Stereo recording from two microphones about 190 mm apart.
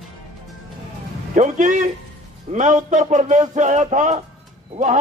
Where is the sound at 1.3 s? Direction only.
40° right (ahead or behind).